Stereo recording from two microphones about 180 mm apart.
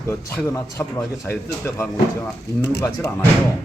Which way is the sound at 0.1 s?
15° left (ahead or behind).